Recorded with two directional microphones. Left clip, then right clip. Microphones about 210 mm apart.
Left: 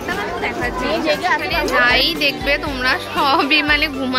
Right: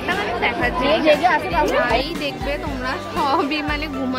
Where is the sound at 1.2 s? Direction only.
30° right (ahead or behind).